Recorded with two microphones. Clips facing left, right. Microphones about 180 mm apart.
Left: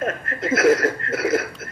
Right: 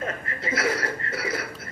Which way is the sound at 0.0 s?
50° left (ahead or behind).